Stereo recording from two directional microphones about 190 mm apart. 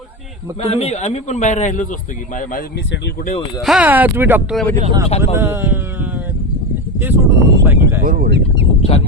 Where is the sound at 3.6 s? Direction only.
5° right (ahead or behind).